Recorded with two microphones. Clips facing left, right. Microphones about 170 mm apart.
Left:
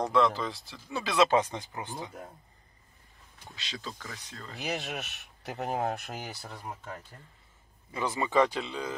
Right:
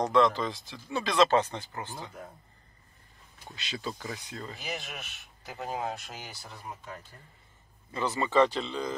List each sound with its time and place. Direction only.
0.0 s speech: 5° left (ahead or behind)
3.5 s speech: 5° right (ahead or behind)
4.6 s speech: 70° left (ahead or behind)
7.9 s speech: 10° left (ahead or behind)